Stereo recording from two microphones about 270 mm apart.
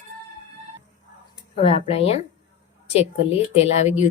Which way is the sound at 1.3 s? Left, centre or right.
Left.